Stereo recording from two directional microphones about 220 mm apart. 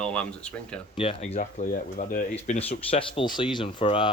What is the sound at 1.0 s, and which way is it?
Speech, 25° left (ahead or behind).